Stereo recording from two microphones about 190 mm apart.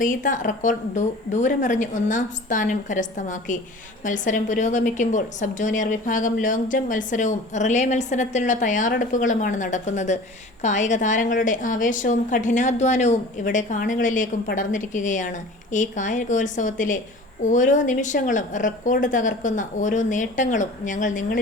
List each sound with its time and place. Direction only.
0.0 s a woman's voice: 45° left (ahead or behind)